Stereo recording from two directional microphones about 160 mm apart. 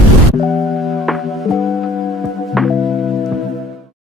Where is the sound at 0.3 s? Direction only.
Centre (ahead or behind).